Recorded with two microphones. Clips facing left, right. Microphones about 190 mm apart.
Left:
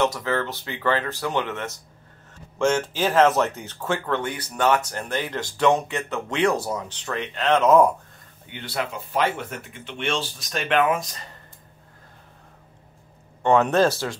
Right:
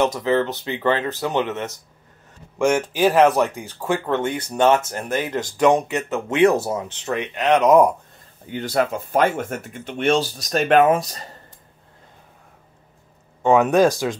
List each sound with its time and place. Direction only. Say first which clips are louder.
0.0 s speech: right 4 dB; 20° right (ahead or behind)
8.5 s speech: right 8 dB; 40° right (ahead or behind)
13.4 s speech: right 3 dB; 10° right (ahead or behind)